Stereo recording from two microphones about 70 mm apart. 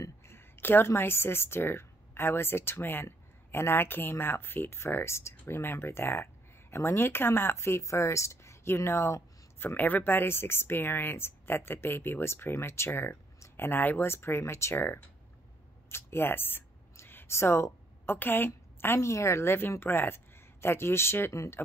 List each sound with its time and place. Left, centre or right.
0.0 s a woman's voice: left
15.9 s a sound: left
18.1 s a woman's voice: left
18.9 s speech: left